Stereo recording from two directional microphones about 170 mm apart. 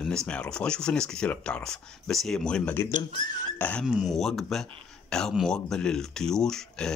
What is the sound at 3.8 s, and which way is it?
Speech, centre (ahead or behind).